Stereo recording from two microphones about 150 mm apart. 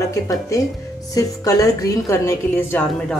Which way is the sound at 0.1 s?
20° left (ahead or behind).